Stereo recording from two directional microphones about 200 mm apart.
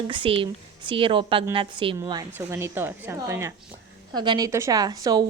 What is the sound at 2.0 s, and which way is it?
A woman's voice, 15° right (ahead or behind).